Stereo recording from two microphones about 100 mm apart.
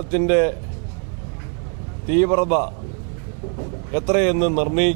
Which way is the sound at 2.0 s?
15° right (ahead or behind).